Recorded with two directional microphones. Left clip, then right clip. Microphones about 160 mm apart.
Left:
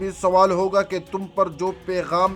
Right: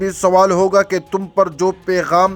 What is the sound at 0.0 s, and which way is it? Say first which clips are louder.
Speech: right 5 dB; 35° right (ahead or behind).